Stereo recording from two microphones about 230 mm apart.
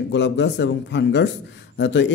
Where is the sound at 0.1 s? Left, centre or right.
Left.